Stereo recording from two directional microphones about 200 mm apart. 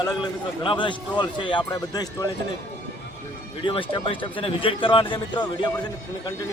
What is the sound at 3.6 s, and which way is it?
Speech, 25° left (ahead or behind).